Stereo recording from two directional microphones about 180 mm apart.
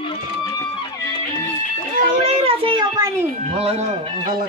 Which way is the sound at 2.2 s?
30° right (ahead or behind).